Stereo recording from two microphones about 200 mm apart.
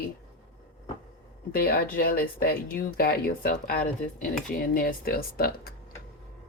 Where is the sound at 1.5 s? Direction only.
50° left (ahead or behind).